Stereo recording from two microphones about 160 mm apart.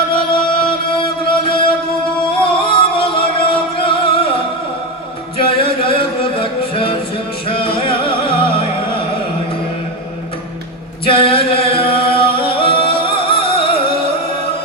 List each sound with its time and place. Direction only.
0.1 s music: 30° left (ahead or behind)
5.4 s music: 35° left (ahead or behind)
11.0 s singing: 35° left (ahead or behind)